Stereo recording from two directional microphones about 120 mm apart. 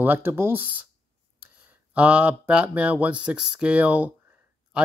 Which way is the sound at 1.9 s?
10° right (ahead or behind).